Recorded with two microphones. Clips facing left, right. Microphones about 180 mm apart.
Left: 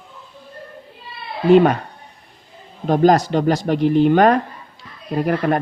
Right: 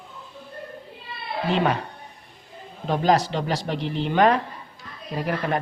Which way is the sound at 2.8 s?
45° left (ahead or behind).